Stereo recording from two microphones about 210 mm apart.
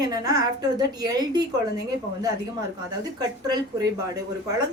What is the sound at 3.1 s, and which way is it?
Speech, 20° right (ahead or behind).